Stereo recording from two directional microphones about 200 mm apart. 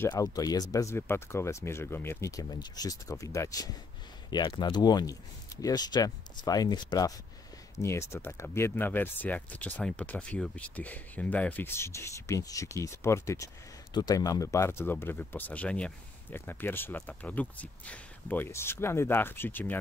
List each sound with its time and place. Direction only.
0.0 s speech: 15° left (ahead or behind)